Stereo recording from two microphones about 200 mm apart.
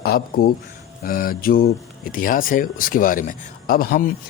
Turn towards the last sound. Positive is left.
turn(degrees=45)  # may be behind; listen again after turning